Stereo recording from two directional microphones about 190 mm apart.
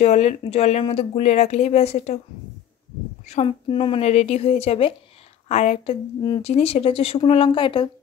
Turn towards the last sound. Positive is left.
turn(degrees=25)  # may be behind; listen again after turning